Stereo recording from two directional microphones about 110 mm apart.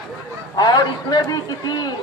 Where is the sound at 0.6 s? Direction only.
35° left (ahead or behind).